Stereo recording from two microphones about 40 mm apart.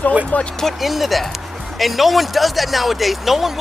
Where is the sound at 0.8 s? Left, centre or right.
Centre.